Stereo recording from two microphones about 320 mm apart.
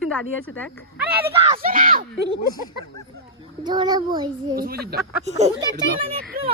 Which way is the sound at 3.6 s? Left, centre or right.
Centre.